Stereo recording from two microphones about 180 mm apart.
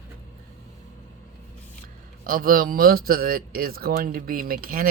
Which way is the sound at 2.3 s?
50° right (ahead or behind).